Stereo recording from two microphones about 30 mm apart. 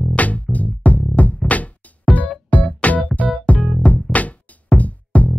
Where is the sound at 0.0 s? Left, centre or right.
Left.